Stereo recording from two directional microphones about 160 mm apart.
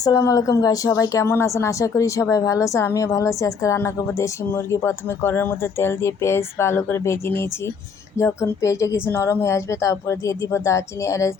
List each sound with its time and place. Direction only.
0.0 s speech: 25° left (ahead or behind)